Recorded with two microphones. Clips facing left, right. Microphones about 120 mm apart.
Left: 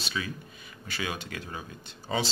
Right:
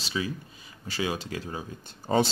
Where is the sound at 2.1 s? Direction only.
45° right (ahead or behind).